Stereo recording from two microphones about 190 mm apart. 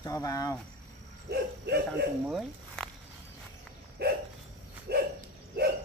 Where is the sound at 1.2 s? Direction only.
60° right (ahead or behind).